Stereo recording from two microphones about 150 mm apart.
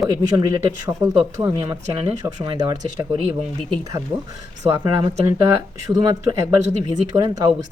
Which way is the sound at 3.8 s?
25° right (ahead or behind).